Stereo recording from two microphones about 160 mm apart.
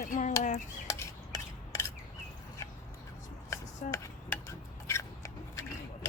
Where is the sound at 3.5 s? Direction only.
20° left (ahead or behind).